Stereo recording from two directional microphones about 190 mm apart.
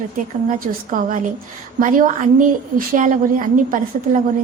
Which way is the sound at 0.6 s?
45° right (ahead or behind).